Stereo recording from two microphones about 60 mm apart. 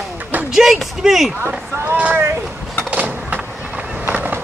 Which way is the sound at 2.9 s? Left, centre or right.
Right.